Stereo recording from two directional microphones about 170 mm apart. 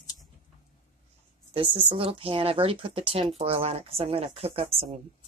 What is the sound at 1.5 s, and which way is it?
Speech, 30° right (ahead or behind).